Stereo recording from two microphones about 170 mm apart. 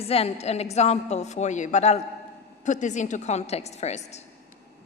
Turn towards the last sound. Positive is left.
turn(degrees=40)  # may be behind; listen again after turning